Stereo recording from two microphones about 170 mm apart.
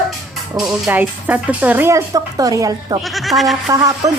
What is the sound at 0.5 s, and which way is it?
Speech, 5° right (ahead or behind).